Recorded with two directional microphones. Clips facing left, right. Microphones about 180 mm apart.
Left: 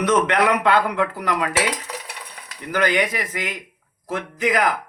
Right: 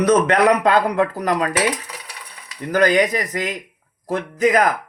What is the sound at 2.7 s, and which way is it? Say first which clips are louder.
Speech: right 5 dB; 40° right (ahead or behind).